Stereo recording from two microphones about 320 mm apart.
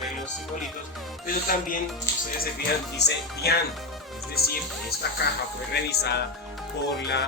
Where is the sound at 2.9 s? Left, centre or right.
Left.